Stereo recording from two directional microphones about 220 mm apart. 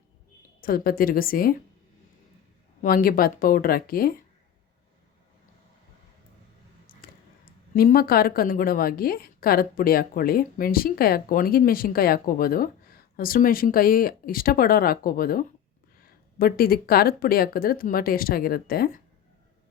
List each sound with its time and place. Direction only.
0.6 s a woman's voice: 40° left (ahead or behind)
2.8 s a woman's voice: 40° left (ahead or behind)
7.0 s a sound: 40° left (ahead or behind)
7.7 s a woman's voice: 40° left (ahead or behind)